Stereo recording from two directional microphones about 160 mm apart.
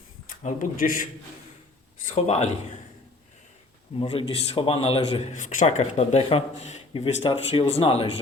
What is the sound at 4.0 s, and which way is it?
A man's voice, 35° left (ahead or behind).